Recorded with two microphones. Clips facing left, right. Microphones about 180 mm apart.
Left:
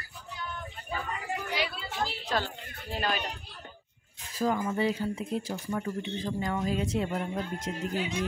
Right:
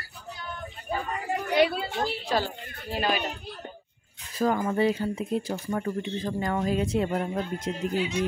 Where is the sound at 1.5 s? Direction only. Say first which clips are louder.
Right 14 dB; 55° right (ahead or behind).